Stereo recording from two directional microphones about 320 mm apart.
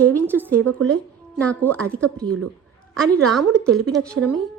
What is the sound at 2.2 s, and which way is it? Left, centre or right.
Speech, right.